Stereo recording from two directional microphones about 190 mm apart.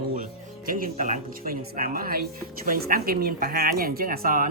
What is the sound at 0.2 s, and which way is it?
A woman's voice, 45° right (ahead or behind).